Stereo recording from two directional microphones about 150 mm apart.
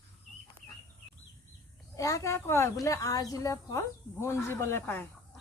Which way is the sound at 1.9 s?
20° left (ahead or behind).